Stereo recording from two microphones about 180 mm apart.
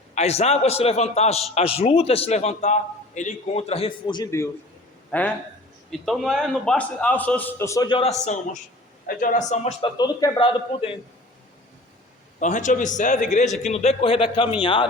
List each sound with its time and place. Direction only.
0.1 s a man's voice: 35° left (ahead or behind)
10.0 s a man's voice: 20° left (ahead or behind)
12.4 s a man's voice: 45° left (ahead or behind); by 14.8 s 30° left (ahead or behind)